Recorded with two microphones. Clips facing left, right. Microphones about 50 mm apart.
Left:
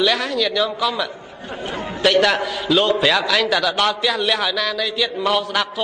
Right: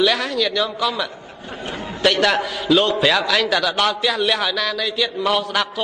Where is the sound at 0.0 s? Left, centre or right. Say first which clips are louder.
Even; centre.